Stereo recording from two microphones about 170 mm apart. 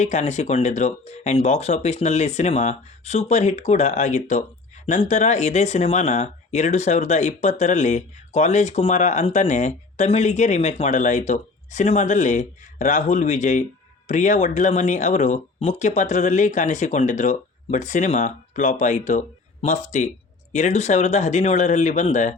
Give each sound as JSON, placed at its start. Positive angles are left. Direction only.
{"t": 0.0, "sound": "speech", "side_deg": 45}